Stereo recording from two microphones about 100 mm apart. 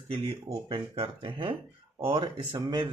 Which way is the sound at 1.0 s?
65° right (ahead or behind).